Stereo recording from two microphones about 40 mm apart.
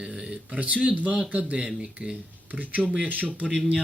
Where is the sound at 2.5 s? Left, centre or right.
Right.